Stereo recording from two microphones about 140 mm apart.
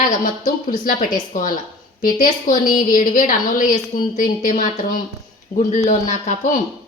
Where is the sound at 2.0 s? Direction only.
90° left.